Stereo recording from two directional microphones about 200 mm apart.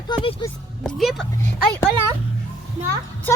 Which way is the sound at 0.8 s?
Centre (ahead or behind).